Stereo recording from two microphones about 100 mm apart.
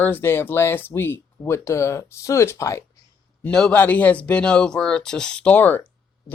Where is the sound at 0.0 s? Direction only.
20° left (ahead or behind).